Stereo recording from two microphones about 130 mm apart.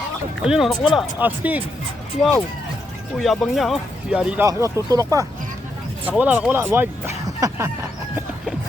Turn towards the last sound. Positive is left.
turn(degrees=-25)  # may be behind; listen again after turning